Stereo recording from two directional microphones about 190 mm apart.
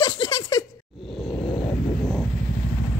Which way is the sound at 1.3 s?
25° left (ahead or behind).